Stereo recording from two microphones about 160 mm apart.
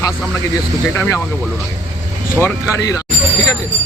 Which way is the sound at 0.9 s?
15° left (ahead or behind).